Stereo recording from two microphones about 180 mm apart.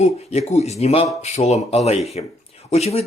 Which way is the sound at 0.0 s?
35° left (ahead or behind).